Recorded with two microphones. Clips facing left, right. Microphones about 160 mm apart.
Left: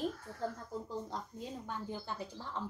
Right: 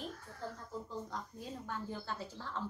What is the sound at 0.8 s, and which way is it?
Speech, 30° left (ahead or behind).